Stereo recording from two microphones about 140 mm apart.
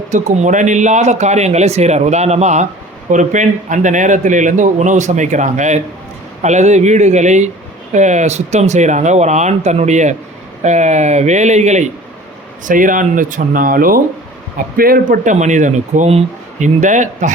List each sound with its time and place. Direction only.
0.1 s a man's voice: 60° right (ahead or behind)
12.6 s a man's voice: 75° right (ahead or behind)